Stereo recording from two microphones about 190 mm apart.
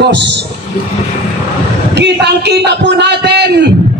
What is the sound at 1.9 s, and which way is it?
A man's voice, 60° right (ahead or behind).